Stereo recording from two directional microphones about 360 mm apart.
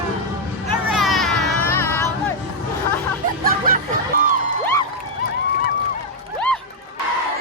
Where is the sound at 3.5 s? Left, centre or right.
Right.